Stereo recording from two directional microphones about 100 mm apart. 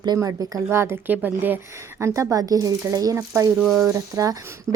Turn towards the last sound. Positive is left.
turn(degrees=-35)  # may be behind; listen again after turning